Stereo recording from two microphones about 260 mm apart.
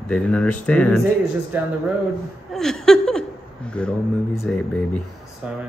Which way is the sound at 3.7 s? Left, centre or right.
Centre.